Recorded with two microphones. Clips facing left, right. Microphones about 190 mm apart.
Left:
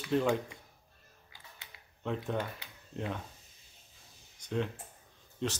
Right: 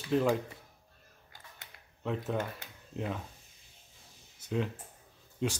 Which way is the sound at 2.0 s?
Centre (ahead or behind).